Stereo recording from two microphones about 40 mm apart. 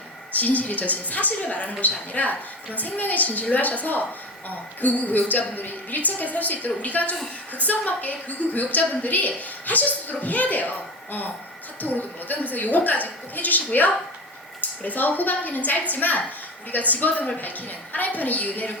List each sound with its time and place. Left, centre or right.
0.3 s a woman's voice: left
14.8 s a woman's voice: left